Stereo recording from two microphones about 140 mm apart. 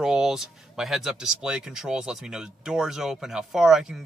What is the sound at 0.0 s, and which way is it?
Speech, 5° right (ahead or behind).